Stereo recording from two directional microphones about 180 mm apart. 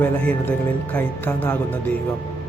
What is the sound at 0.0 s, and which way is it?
Speech, 10° left (ahead or behind).